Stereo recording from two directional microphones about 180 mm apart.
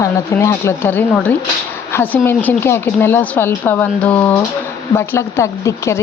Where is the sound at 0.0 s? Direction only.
15° left (ahead or behind).